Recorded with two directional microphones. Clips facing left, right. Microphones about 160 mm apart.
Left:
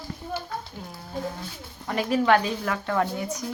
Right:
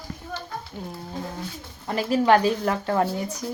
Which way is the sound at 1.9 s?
30° right (ahead or behind).